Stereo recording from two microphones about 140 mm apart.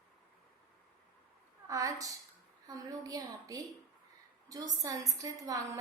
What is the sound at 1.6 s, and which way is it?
A woman's voice, 25° right (ahead or behind).